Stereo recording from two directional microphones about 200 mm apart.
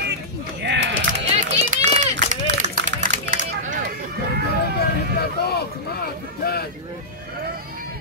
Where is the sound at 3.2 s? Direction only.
40° right (ahead or behind).